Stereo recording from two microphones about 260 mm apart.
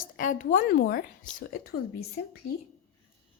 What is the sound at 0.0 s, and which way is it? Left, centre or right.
A woman's voice, left.